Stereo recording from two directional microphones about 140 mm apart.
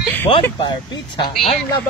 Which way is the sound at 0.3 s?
35° left (ahead or behind).